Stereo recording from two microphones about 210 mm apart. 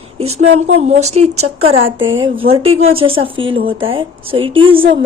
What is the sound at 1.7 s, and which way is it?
Speech, 70° right (ahead or behind).